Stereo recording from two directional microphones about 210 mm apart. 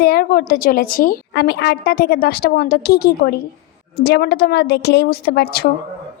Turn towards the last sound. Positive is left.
turn(degrees=45)  # may be behind; listen again after turning